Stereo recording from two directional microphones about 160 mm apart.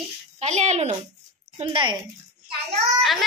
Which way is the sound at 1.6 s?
30° right (ahead or behind).